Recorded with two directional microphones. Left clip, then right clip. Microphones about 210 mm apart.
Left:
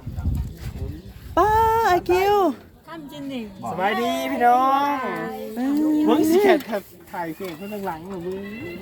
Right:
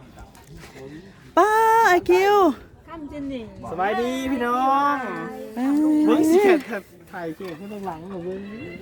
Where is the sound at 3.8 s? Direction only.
5° right (ahead or behind).